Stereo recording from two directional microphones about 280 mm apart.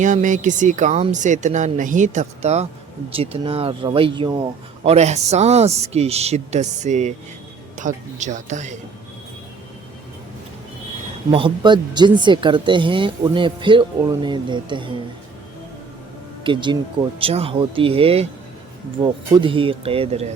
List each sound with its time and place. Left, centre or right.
0.0 s speech: right
11.3 s speech: centre
16.4 s speech: centre